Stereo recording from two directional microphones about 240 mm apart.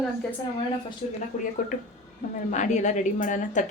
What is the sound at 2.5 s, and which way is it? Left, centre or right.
A woman's voice, left.